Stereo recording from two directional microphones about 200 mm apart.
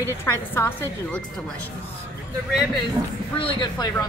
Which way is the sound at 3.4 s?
25° left (ahead or behind).